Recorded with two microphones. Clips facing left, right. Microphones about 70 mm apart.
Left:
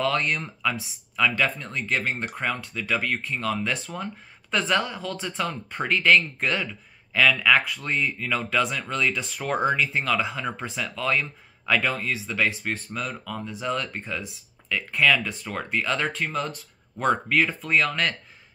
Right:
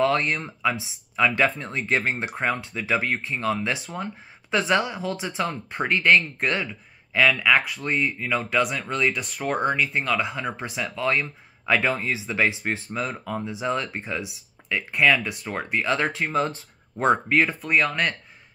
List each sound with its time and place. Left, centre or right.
0.0 s speech: centre
9.2 s speech: centre
16.3 s speech: right
17.0 s speech: centre